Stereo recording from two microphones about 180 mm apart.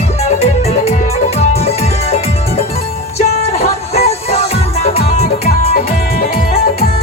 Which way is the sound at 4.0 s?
35° left (ahead or behind).